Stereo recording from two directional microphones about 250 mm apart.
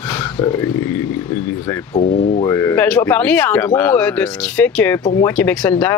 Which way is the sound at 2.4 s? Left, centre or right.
Centre.